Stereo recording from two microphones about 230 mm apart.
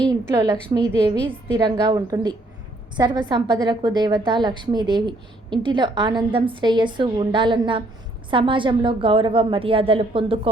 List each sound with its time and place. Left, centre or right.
0.1 s a woman's voice: centre